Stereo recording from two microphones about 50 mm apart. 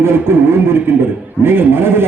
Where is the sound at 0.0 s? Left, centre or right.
Right.